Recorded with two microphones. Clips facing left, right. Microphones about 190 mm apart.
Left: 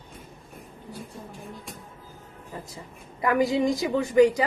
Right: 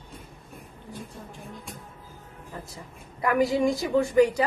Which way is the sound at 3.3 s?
15° left (ahead or behind).